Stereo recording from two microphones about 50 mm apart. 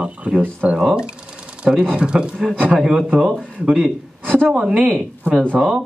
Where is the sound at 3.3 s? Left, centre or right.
Centre.